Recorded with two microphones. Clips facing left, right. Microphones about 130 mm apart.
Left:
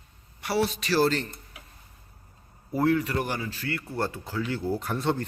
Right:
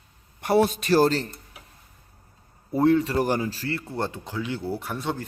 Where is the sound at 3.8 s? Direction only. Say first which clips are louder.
Right 1 dB; 20° right (ahead or behind); by 5.2 s 5° right (ahead or behind).